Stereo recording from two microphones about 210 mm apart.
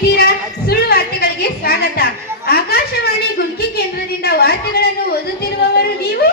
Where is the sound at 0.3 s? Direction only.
50° left (ahead or behind).